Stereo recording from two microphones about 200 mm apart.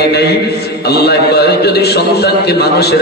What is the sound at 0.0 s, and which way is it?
A man's voice, 55° left (ahead or behind).